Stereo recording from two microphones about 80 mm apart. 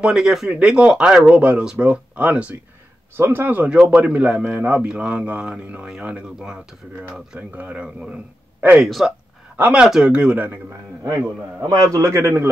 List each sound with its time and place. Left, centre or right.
0.0 s speech: centre
3.2 s speech: right
3.7 s speech: centre
9.6 s speech: centre
11.6 s a man's voice: right